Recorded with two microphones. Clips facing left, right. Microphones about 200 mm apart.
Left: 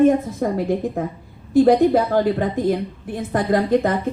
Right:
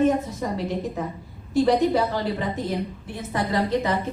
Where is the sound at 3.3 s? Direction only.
50° left (ahead or behind).